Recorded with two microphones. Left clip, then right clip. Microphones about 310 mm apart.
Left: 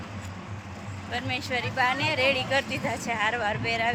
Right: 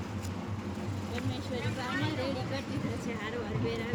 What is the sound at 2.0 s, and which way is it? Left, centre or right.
Speech, left.